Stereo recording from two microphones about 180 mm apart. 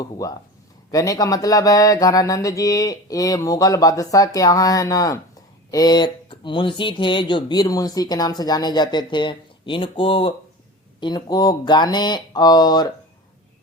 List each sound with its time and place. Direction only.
0.0 s speech: 20° left (ahead or behind)